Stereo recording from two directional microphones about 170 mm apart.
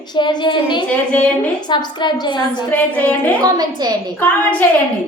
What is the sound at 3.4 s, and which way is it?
Speech, 25° right (ahead or behind).